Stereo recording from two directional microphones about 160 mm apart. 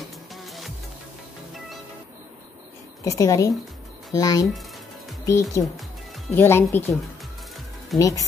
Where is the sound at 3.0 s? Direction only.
20° left (ahead or behind).